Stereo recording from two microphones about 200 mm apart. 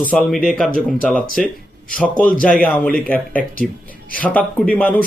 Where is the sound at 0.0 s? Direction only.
5° left (ahead or behind).